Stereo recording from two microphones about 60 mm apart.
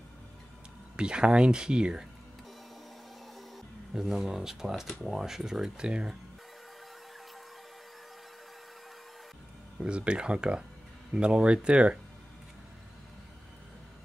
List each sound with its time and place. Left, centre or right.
0.9 s speech: centre
3.9 s speech: centre
9.8 s speech: centre